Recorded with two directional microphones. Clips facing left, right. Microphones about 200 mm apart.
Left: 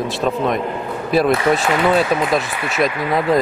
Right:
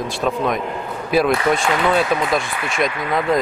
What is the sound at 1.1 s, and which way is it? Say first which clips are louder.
Speech: left 1 dB; centre (ahead or behind).